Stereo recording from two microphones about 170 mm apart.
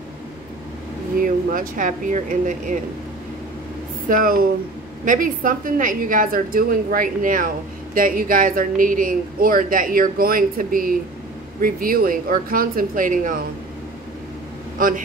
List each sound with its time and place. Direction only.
1.2 s a woman's voice: 55° right (ahead or behind)
4.1 s a woman's voice: 55° right (ahead or behind)
14.8 s a woman's voice: 55° right (ahead or behind)